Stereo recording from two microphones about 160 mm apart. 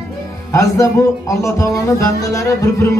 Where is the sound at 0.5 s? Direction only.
20° left (ahead or behind).